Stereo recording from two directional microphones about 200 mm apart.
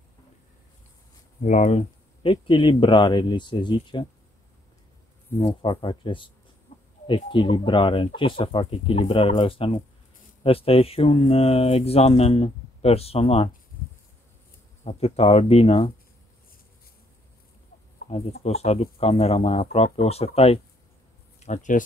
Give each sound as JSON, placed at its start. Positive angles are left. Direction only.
{"t": 1.4, "sound": "speech", "side_deg": 35}
{"t": 5.5, "sound": "speech", "side_deg": 25}
{"t": 6.7, "sound": "a sound", "side_deg": 35}
{"t": 7.1, "sound": "speech", "side_deg": 25}
{"t": 14.9, "sound": "speech", "side_deg": 30}
{"t": 18.4, "sound": "speech", "side_deg": 30}